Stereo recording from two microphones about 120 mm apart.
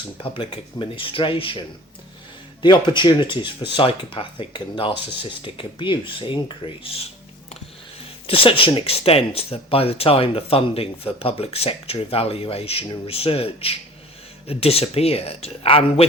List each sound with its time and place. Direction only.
0.2 s speech: 45° left (ahead or behind)
8.3 s speech: 50° left (ahead or behind)